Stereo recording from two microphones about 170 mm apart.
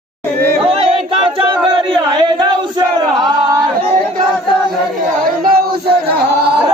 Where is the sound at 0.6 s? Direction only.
35° right (ahead or behind).